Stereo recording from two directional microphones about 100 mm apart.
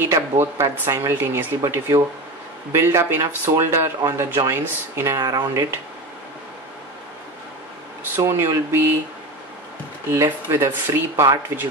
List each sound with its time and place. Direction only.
0.0 s speech: 25° right (ahead or behind)
5.2 s speech: 40° right (ahead or behind)
8.2 s speech: 25° right (ahead or behind)
10.1 s speech: 25° right (ahead or behind)